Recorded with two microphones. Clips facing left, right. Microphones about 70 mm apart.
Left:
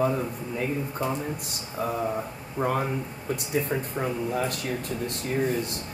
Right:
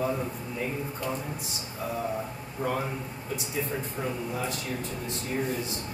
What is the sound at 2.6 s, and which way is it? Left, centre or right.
Speech, left.